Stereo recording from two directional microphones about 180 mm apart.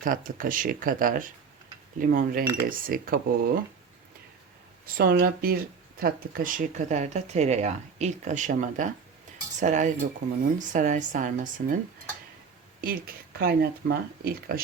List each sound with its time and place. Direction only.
0.0 s speech: 50° right (ahead or behind)
4.9 s speech: 55° right (ahead or behind)
12.8 s speech: 55° right (ahead or behind)